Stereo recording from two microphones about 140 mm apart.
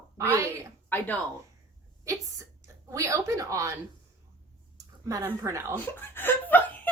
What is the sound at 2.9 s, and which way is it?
Speech, 20° right (ahead or behind).